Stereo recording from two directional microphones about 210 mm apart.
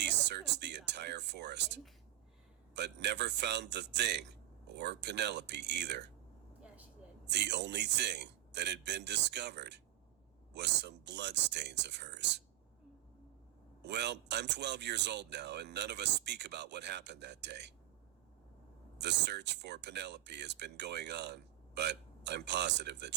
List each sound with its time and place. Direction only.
0.0 s a sound: 55° right (ahead or behind)
2.7 s speech: 55° right (ahead or behind)
7.3 s speech: 55° right (ahead or behind)
13.8 s speech: 55° right (ahead or behind)
18.9 s speech: 55° right (ahead or behind)